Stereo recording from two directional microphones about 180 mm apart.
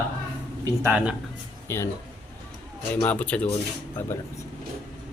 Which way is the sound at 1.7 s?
15° left (ahead or behind).